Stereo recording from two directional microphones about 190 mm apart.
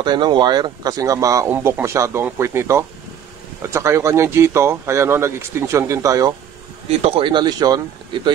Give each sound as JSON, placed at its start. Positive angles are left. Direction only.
{"t": 0.0, "sound": "speech", "side_deg": -25}
{"t": 7.0, "sound": "speech", "side_deg": -30}